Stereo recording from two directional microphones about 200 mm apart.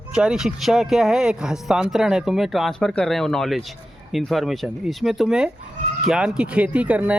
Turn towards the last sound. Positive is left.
turn(degrees=-5)  # may be behind; listen again after turning